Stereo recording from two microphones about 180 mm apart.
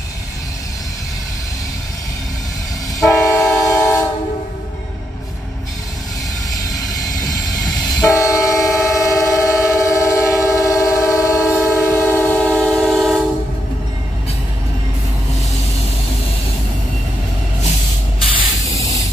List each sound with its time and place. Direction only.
3.1 s train: 15° left (ahead or behind)
8.1 s train: 15° left (ahead or behind); by 13.2 s centre (ahead or behind)
18.7 s spray: 35° right (ahead or behind)